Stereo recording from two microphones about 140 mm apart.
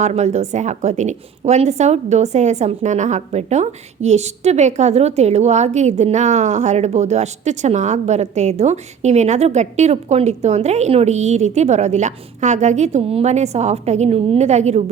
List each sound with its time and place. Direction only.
0.0 s a woman's voice: 55° right (ahead or behind)